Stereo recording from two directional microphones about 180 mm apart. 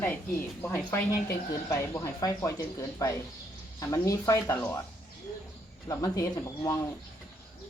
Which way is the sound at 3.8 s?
15° left (ahead or behind).